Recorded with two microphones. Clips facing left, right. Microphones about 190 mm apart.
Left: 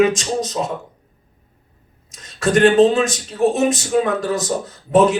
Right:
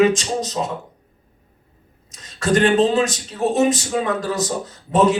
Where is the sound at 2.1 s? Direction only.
50° left (ahead or behind).